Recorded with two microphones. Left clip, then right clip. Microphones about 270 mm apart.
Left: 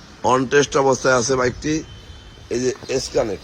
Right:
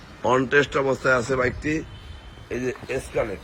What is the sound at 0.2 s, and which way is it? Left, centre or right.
A man's voice, centre.